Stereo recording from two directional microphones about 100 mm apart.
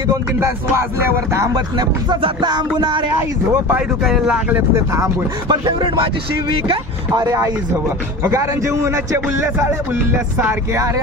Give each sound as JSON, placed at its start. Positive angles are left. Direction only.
{"t": 0.4, "sound": "speech", "side_deg": -25}
{"t": 2.4, "sound": "music", "side_deg": -45}
{"t": 4.0, "sound": "speech", "side_deg": -5}
{"t": 4.5, "sound": "speech", "side_deg": -25}
{"t": 5.5, "sound": "music", "side_deg": -50}
{"t": 7.1, "sound": "speech", "side_deg": -35}